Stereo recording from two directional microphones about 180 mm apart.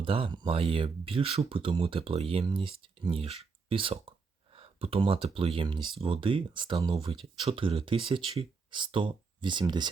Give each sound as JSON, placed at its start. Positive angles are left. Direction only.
{"t": 0.0, "sound": "speech", "side_deg": -30}